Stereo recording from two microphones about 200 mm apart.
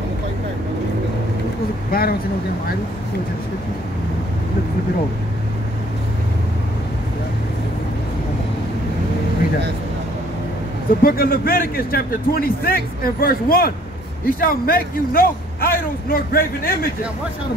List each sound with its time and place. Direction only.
1.9 s speech: 50° left (ahead or behind)
11.0 s a man's voice: 45° left (ahead or behind)